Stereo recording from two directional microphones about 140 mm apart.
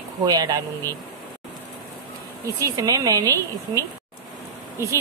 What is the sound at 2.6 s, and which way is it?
Speech, 25° right (ahead or behind).